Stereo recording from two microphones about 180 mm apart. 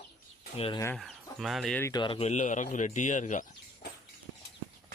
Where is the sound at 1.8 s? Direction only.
25° left (ahead or behind); by 3.4 s 45° left (ahead or behind).